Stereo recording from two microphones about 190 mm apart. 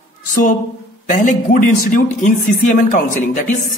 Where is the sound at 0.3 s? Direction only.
45° left (ahead or behind).